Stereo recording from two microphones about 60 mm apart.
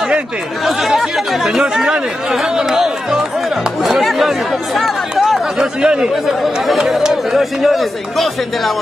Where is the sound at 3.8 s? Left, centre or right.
Centre.